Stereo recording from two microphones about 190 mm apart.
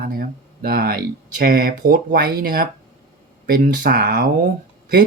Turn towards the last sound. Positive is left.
turn(degrees=-50)  # may be behind; listen again after turning